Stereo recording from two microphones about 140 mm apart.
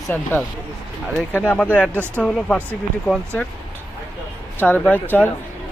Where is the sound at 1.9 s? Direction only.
15° right (ahead or behind).